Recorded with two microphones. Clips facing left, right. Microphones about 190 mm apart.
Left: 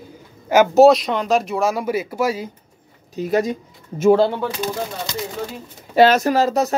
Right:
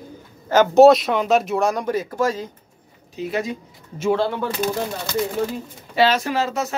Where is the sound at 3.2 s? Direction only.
40° left (ahead or behind).